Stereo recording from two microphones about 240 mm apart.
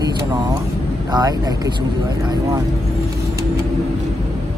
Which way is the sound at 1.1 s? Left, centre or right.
Centre.